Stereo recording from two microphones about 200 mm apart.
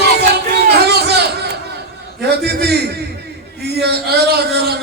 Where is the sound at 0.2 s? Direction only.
55° right (ahead or behind).